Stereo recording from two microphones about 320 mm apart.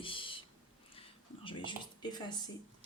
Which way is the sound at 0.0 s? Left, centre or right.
Centre.